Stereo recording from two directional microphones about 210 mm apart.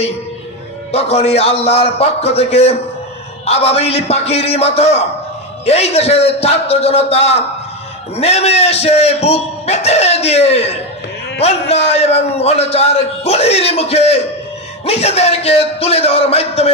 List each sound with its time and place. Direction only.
0.9 s a man's voice: 30° left (ahead or behind)